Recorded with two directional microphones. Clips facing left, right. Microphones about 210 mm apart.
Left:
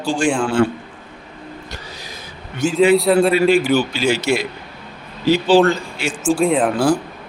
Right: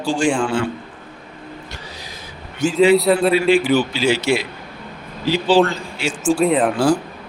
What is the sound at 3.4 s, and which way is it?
Speech, 45° left (ahead or behind).